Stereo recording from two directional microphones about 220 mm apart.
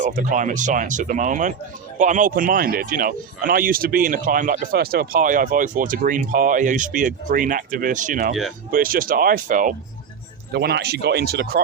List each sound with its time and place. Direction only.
0.0 s speech: 35° right (ahead or behind)
10.5 s speech: 50° right (ahead or behind)